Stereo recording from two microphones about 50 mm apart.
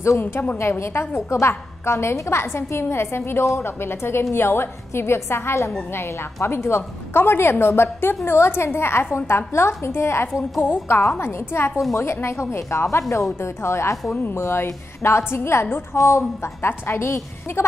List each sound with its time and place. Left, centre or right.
0.2 s a woman's voice: left
0.6 s a woman's voice: left
3.4 s a woman's voice: left
3.8 s a woman's voice: left
10.6 s a woman's voice: left
15.9 s a woman's voice: left
16.6 s a woman's voice: left